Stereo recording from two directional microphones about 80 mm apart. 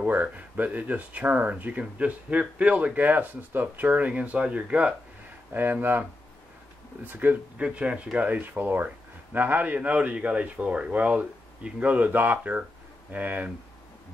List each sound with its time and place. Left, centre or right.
0.0 s speech: right